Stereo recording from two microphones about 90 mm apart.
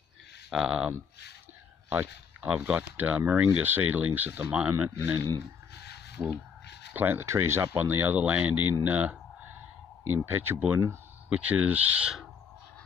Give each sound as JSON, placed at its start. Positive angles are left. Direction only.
{"t": 0.5, "sound": "speech", "side_deg": -5}
{"t": 4.9, "sound": "speech", "side_deg": -25}
{"t": 6.9, "sound": "speech", "side_deg": -20}
{"t": 8.8, "sound": "a sound", "side_deg": -20}
{"t": 10.0, "sound": "speech", "side_deg": -25}